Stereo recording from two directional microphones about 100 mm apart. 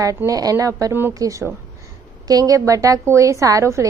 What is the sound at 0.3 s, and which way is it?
A woman's voice, 35° right (ahead or behind).